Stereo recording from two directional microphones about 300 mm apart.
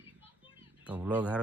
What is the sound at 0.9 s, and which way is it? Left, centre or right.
Speech, centre.